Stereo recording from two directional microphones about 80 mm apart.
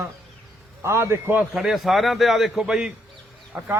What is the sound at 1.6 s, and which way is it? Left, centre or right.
A man's voice, centre.